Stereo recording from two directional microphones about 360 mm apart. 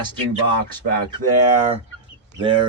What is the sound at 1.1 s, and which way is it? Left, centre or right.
Speech, centre.